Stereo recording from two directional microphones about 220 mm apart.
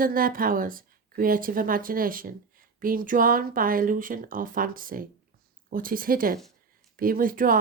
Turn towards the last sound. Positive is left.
turn(degrees=-40)  # may be behind; listen again after turning